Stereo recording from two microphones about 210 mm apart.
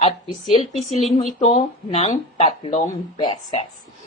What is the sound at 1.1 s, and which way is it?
Speech, 35° left (ahead or behind).